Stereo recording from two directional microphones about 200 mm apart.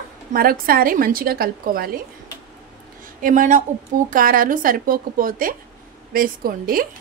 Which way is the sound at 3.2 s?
40° right (ahead or behind).